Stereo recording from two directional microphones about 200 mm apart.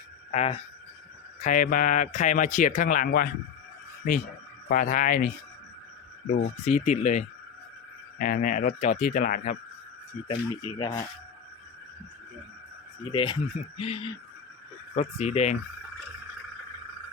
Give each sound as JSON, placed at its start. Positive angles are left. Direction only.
{"t": 0.3, "sound": "speech", "side_deg": 30}
{"t": 6.3, "sound": "speech", "side_deg": 35}
{"t": 10.8, "sound": "speech", "side_deg": 20}
{"t": 13.1, "sound": "speech", "side_deg": 25}